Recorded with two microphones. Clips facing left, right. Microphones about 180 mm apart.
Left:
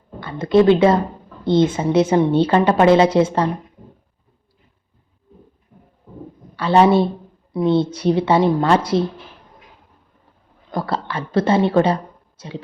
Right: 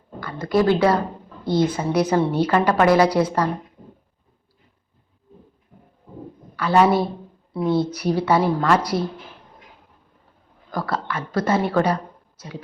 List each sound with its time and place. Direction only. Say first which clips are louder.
0.2 s a woman's voice: left 5 dB; 25° left (ahead or behind)
6.6 s a woman's voice: left 3 dB; 30° left (ahead or behind)
10.7 s a woman's voice: left 2 dB; 25° left (ahead or behind)